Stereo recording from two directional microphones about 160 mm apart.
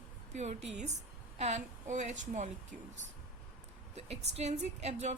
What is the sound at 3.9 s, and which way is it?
A woman's voice, 40° right (ahead or behind).